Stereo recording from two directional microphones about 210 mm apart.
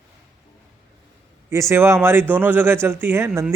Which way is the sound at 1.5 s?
15° right (ahead or behind).